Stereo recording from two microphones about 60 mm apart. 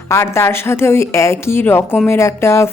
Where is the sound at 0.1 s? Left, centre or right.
Left.